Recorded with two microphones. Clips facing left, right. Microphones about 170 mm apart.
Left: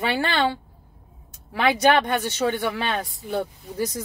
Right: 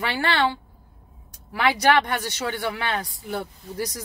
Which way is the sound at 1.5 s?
25° left (ahead or behind).